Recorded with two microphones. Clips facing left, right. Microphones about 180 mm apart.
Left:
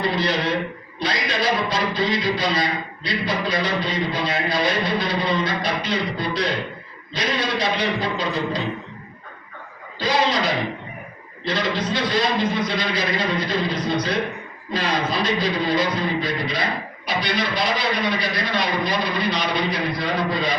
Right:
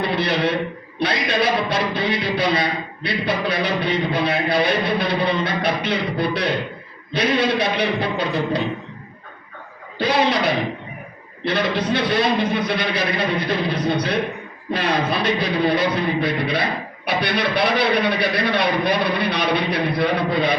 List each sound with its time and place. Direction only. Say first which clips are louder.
0.9 s a man's voice: right 4 dB; 60° right (ahead or behind)
10.0 s a man's voice: right 2 dB; 60° right (ahead or behind)